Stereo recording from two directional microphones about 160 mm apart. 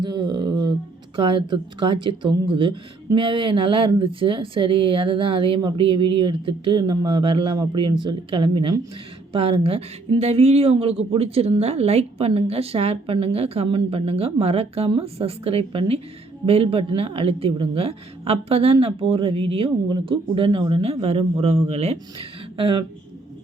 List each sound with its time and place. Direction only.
0.0 s speech: 25° right (ahead or behind)